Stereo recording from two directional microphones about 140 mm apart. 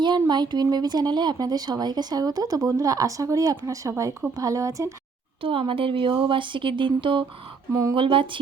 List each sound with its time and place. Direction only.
0.0 s speech: 30° right (ahead or behind)
5.4 s speech: 40° right (ahead or behind)
7.7 s speech: 25° right (ahead or behind)
7.9 s speech: 40° right (ahead or behind)